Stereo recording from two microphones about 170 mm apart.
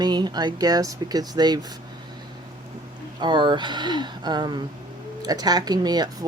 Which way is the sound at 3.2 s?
25° right (ahead or behind).